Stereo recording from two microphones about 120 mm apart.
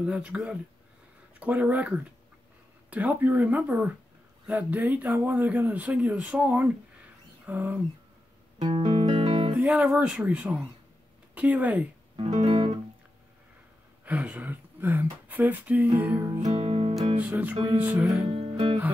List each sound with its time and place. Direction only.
0.0 s speech: 10° right (ahead or behind)
8.7 s music: 60° right (ahead or behind)
9.6 s speech: 10° right (ahead or behind)
12.3 s music: 65° right (ahead or behind)
14.0 s speech: 10° right (ahead or behind)
16.3 s music: 65° right (ahead or behind)
17.2 s speech: 15° right (ahead or behind)
18.2 s music: 60° right (ahead or behind)